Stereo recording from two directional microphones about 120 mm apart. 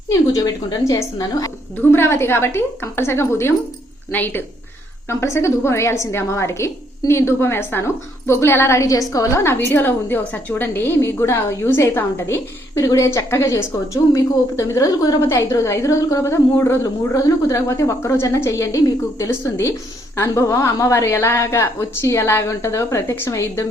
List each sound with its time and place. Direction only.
0.1 s a woman's voice: 30° left (ahead or behind)